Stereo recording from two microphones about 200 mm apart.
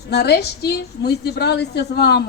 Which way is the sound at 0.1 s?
55° left (ahead or behind).